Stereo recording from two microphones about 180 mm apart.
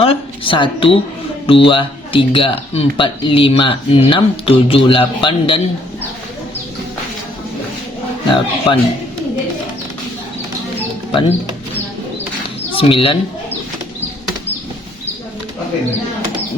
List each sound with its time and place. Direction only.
0.0 s speech: 30° left (ahead or behind)
8.3 s speech: 30° left (ahead or behind)
11.1 s speech: 30° left (ahead or behind)
12.7 s speech: 30° left (ahead or behind)